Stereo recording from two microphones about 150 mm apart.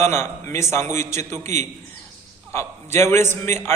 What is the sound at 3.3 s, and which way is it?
Speech, 15° left (ahead or behind).